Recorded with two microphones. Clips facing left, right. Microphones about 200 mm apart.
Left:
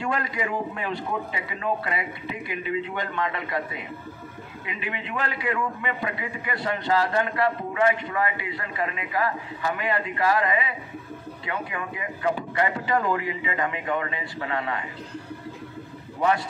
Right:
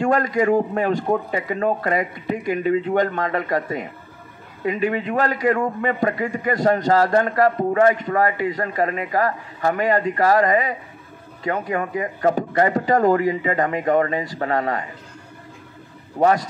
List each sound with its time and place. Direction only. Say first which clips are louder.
0.0 s a man's voice: right 10 dB; 45° right (ahead or behind)
16.2 s a man's voice: right 6 dB; 40° right (ahead or behind)